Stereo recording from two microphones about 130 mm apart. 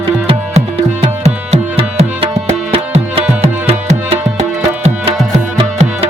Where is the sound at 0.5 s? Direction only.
50° right (ahead or behind).